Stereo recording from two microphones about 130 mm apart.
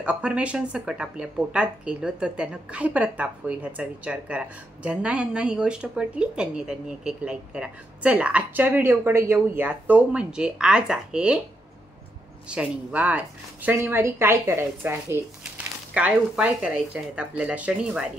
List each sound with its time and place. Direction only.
0.0 s speech: 10° right (ahead or behind)
12.4 s speech: 10° right (ahead or behind)